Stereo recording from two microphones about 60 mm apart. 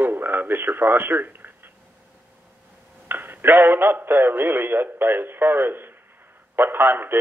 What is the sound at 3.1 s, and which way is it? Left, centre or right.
Speech, right.